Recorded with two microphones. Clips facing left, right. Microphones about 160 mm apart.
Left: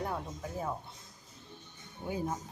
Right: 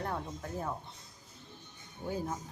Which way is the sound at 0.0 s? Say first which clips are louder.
Left 1 dB; 5° left (ahead or behind).